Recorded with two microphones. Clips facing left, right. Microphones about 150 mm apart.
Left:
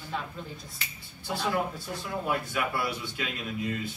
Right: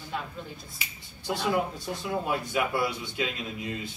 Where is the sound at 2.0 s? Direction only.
20° right (ahead or behind).